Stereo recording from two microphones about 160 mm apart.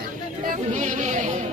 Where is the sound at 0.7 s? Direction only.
50° right (ahead or behind).